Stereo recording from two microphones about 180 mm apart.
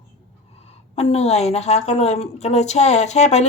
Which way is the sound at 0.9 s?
35° left (ahead or behind).